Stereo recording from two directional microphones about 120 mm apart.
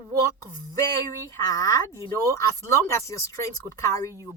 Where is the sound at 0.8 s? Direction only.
25° left (ahead or behind).